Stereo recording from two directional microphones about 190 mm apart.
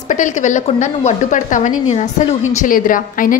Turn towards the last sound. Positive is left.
turn(degrees=45)  # may be behind; listen again after turning